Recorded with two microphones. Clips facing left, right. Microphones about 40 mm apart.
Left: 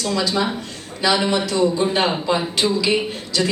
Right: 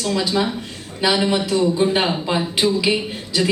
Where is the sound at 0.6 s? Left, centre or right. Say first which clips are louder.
Right 1 dB; centre.